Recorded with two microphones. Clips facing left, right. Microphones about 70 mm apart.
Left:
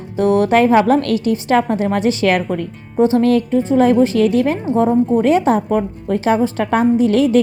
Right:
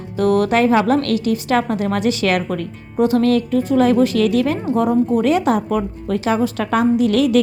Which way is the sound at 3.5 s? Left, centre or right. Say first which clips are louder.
Left 2 dB; left.